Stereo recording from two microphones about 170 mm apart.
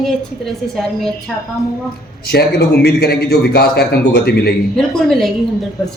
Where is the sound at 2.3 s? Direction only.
75° left (ahead or behind).